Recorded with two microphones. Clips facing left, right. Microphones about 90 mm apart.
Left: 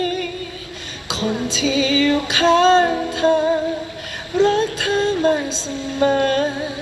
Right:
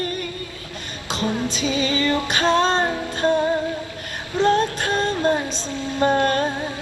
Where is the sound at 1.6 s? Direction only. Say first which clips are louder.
Left 7 dB; 40° right (ahead or behind).